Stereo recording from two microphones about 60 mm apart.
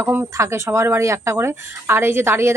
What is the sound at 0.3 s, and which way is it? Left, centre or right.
A woman's voice, right.